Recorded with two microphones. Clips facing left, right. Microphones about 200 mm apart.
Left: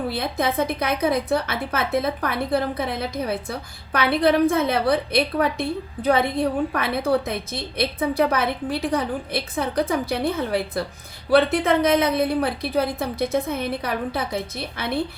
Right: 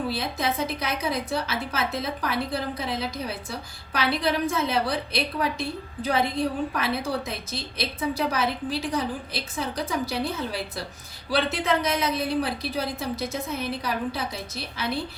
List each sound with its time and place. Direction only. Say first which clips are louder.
0.1 s a woman's voice: left 4 dB; 55° left (ahead or behind)